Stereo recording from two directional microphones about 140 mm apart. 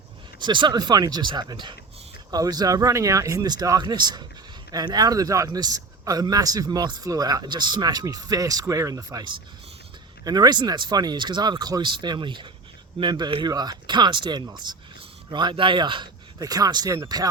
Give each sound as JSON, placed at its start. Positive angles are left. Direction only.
{"t": 0.3, "sound": "a man's voice", "side_deg": -35}